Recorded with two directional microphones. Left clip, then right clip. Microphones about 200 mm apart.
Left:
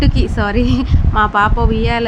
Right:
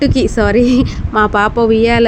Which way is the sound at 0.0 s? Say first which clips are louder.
Right 6 dB; 20° right (ahead or behind).